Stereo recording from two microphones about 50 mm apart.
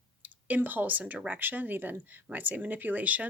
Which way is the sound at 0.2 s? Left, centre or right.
Right.